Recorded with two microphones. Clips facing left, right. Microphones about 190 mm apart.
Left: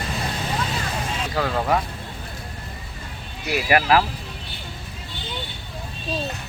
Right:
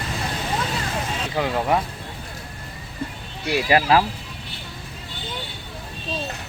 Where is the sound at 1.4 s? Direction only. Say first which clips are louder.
Right 1 dB; 15° right (ahead or behind).